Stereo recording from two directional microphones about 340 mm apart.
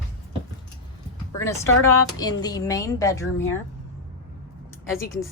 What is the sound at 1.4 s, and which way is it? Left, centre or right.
A woman's voice, centre.